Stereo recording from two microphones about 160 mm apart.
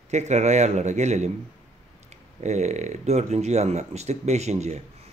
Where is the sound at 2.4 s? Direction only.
45° right (ahead or behind).